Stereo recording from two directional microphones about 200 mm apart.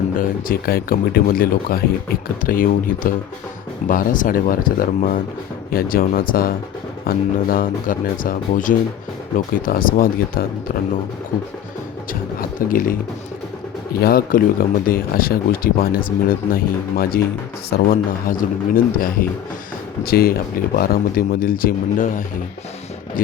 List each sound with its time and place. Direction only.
0.2 s speech: 45° left (ahead or behind)
12.4 s speech: 45° left (ahead or behind)